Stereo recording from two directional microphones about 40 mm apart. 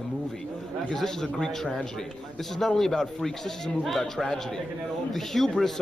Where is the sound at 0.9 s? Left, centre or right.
Centre.